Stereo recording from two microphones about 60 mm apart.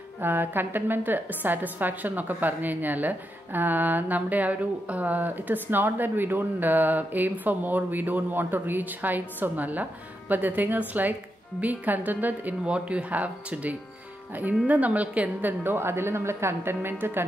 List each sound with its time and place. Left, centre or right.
0.2 s a woman's voice: right
15.6 s a woman's voice: right